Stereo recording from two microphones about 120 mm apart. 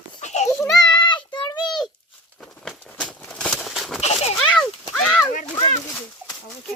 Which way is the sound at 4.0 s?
65° left (ahead or behind).